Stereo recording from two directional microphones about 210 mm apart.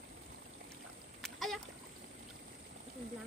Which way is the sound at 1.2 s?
Centre (ahead or behind).